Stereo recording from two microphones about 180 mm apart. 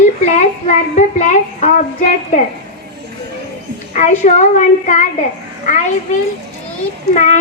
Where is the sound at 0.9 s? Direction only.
45° left (ahead or behind).